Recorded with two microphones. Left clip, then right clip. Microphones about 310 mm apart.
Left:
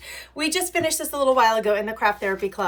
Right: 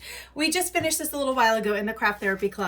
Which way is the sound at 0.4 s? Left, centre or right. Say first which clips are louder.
Left 1 dB; right.